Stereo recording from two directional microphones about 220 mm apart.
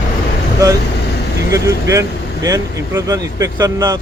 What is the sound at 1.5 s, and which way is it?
Speech, 15° right (ahead or behind).